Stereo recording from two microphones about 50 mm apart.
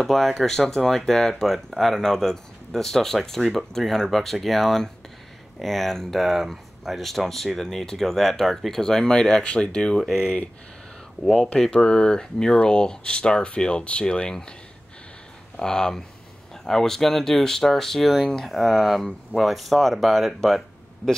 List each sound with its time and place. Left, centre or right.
0.0 s speech: centre; by 10.5 s left
11.6 s speech: centre
15.6 s speech: centre